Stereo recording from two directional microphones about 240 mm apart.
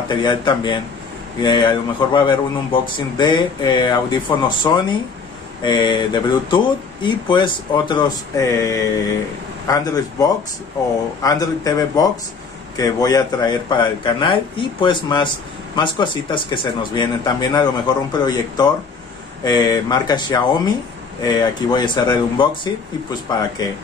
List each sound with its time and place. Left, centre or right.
0.1 s speech: centre